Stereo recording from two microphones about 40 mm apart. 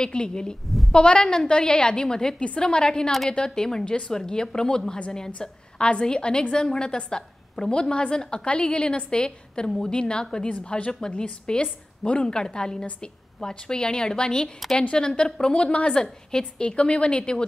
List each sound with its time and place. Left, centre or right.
0.0 s a woman's voice: left
0.7 s a woman's voice: centre
0.9 s a woman's voice: left
15.9 s a woman's voice: centre